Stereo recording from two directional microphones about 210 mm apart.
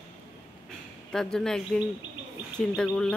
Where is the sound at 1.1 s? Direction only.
Centre (ahead or behind).